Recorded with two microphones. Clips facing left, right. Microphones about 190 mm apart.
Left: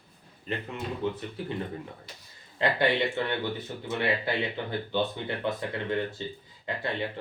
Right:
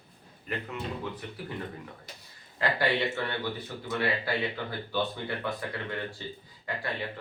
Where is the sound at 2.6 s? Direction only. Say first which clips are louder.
Left 2 dB; 25° left (ahead or behind).